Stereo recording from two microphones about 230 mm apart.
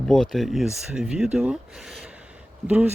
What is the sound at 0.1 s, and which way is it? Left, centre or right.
Speech, centre.